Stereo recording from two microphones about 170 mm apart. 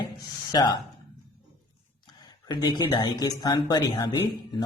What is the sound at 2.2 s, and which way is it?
Speech, 25° left (ahead or behind).